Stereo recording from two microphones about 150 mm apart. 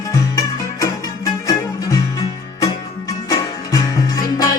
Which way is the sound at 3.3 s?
25° left (ahead or behind).